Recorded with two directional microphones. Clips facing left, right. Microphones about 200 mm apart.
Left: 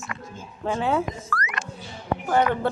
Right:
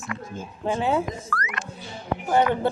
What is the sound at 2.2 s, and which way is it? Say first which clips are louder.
Speech: right 1 dB; 25° right (ahead or behind).